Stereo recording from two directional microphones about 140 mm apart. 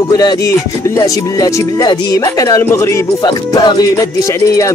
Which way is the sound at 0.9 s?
25° left (ahead or behind).